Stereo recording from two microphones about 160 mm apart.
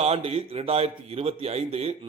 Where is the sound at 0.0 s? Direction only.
40° right (ahead or behind).